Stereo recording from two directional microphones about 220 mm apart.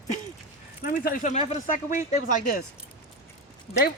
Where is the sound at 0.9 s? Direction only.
40° left (ahead or behind).